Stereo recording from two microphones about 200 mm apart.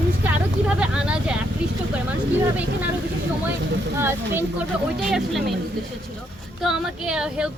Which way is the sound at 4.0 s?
10° right (ahead or behind).